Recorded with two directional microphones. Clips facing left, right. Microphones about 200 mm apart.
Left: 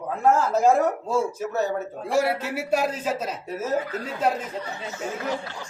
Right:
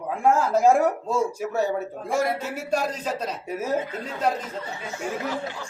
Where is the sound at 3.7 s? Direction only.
25° right (ahead or behind).